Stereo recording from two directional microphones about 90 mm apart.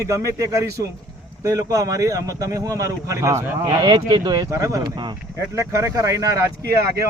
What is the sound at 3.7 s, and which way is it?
Speech, 50° right (ahead or behind).